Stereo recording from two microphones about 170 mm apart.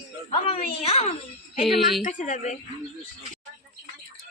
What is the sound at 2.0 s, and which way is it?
Speech, 45° left (ahead or behind).